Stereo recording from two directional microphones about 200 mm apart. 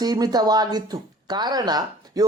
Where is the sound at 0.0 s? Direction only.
20° right (ahead or behind).